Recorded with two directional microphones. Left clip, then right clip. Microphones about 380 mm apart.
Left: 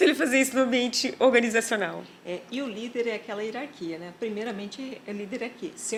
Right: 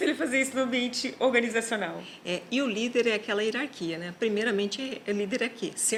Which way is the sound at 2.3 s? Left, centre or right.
Right.